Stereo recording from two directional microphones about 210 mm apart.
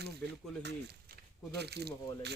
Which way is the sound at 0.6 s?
50° right (ahead or behind).